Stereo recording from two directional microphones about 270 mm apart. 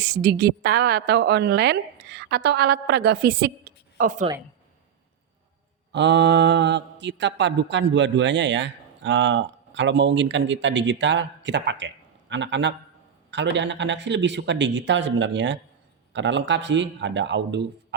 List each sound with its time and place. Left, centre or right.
0.0 s speech: right
5.9 s speech: right